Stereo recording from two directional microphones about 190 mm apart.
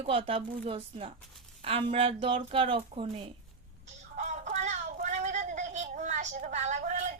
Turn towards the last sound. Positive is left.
turn(degrees=-40)  # may be behind; listen again after turning